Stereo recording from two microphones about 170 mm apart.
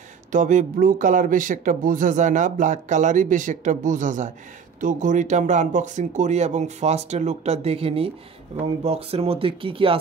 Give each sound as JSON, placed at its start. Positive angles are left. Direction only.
{"t": 0.3, "sound": "speech", "side_deg": -50}